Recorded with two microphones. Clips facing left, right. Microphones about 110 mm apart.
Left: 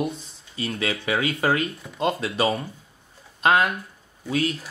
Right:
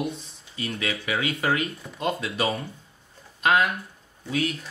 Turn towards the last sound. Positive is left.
turn(degrees=35)  # may be behind; listen again after turning